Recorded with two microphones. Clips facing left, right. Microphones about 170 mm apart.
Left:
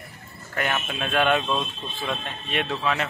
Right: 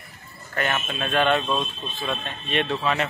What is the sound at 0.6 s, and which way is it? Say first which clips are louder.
Speech: right 1 dB; 10° left (ahead or behind).